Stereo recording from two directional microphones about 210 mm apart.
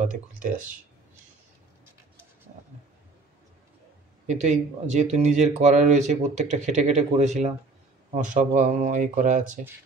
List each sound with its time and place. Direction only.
0.1 s speech: 40° right (ahead or behind)
4.3 s speech: 35° right (ahead or behind)